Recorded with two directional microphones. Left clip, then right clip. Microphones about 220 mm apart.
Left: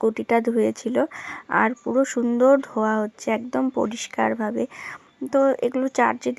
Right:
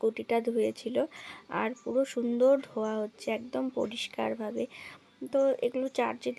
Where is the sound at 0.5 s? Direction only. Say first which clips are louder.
Left 7 dB; 50° left (ahead or behind).